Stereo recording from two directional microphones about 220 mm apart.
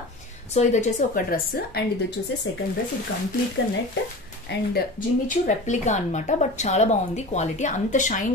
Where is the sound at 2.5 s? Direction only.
55° left (ahead or behind).